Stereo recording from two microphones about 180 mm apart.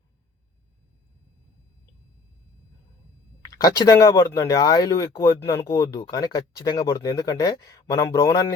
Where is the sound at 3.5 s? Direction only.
20° left (ahead or behind).